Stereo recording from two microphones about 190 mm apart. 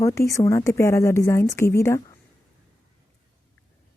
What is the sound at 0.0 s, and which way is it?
A woman's voice, 15° left (ahead or behind).